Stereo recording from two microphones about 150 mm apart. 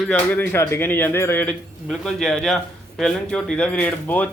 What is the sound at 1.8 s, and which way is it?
A man's voice, 5° left (ahead or behind).